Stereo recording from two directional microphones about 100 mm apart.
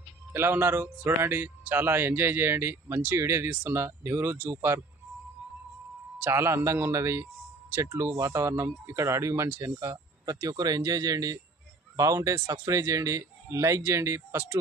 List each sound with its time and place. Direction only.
0.3 s a man's voice: 25° right (ahead or behind)
6.2 s a man's voice: 25° right (ahead or behind)